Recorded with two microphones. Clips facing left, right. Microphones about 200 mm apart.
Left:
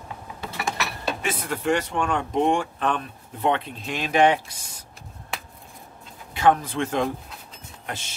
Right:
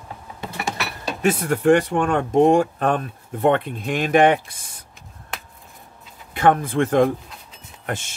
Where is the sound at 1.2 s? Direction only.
45° right (ahead or behind).